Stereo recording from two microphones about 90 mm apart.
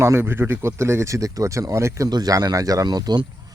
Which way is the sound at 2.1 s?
45° right (ahead or behind).